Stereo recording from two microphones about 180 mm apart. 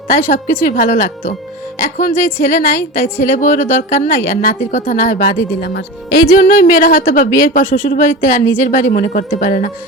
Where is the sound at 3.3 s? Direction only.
45° left (ahead or behind).